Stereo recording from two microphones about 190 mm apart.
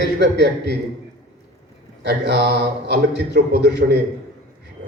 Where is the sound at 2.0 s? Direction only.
60° right (ahead or behind).